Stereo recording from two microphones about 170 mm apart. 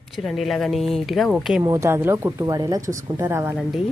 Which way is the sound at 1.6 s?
20° right (ahead or behind).